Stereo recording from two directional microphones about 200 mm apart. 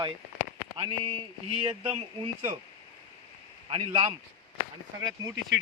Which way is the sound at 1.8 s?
30° right (ahead or behind).